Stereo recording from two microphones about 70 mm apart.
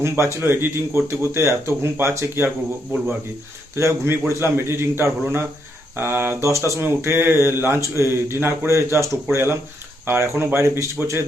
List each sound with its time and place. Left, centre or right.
0.0 s speech: right
3.8 s speech: right